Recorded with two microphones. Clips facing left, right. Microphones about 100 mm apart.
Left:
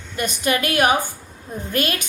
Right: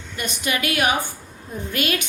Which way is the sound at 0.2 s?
45° left (ahead or behind).